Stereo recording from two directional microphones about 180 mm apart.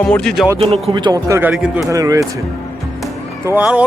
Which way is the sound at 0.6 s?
35° right (ahead or behind).